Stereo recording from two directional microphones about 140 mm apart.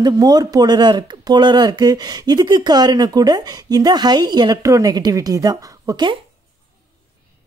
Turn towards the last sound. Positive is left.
turn(degrees=-30)  # may be behind; listen again after turning